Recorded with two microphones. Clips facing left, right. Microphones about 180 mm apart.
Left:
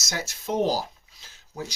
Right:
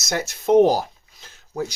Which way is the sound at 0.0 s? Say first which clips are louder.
Right 8 dB; 55° right (ahead or behind).